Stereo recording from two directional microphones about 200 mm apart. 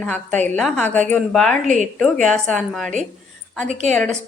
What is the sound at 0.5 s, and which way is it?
A woman's voice, 5° left (ahead or behind).